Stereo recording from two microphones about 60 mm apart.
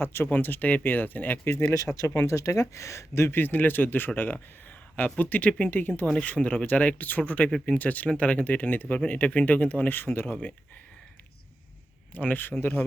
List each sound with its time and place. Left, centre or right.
0.0 s speech: left
0.3 s speech: left
1.9 s speech: centre
2.2 s speech: left
3.2 s speech: left
12.1 s speech: left